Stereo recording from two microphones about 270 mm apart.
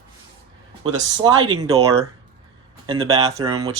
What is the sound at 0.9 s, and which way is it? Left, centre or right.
Speech, centre.